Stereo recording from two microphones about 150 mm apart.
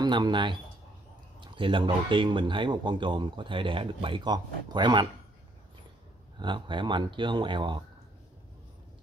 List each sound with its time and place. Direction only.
0.0 s speech: 30° right (ahead or behind)
6.4 s speech: 30° right (ahead or behind)